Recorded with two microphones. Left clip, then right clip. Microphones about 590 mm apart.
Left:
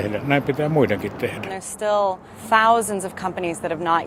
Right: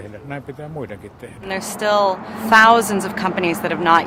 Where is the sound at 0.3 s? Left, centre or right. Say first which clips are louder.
Left 11 dB; right.